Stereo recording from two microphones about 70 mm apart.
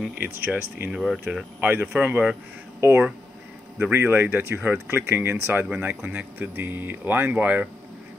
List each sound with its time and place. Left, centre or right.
0.5 s speech: centre
1.6 s speech: right
2.8 s speech: right